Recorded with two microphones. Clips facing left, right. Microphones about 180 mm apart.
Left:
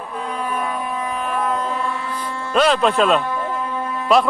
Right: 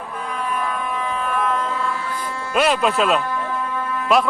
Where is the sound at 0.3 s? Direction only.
25° left (ahead or behind).